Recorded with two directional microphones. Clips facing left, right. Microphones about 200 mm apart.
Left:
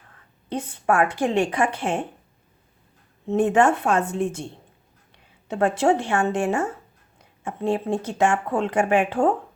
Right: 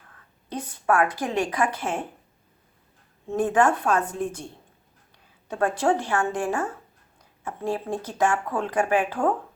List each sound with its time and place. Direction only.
0.6 s speech: 25° left (ahead or behind)
3.2 s speech: 25° left (ahead or behind)
5.5 s speech: 25° left (ahead or behind)